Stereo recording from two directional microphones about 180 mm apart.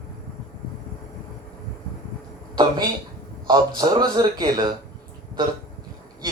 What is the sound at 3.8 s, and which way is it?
Speech, 25° right (ahead or behind).